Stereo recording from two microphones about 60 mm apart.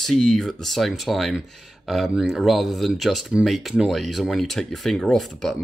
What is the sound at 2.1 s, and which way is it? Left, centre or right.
Speech, centre.